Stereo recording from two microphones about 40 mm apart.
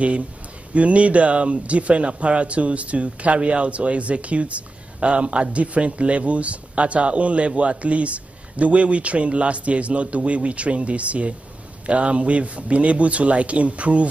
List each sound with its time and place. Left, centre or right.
0.7 s speech: right